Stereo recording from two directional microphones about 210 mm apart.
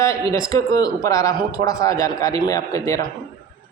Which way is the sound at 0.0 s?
15° left (ahead or behind).